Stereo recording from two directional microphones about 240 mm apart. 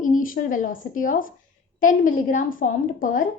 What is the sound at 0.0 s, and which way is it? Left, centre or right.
A woman's voice, left.